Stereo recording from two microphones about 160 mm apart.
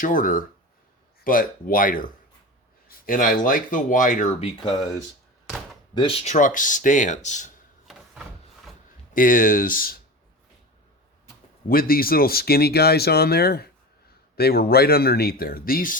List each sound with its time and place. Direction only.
0.0 s speech: 55° left (ahead or behind)
3.1 s speech: 60° left (ahead or behind)
4.4 s speech: 40° left (ahead or behind)
5.9 s speech: 35° left (ahead or behind)
9.1 s speech: 55° left (ahead or behind)
11.7 s speech: 65° left (ahead or behind)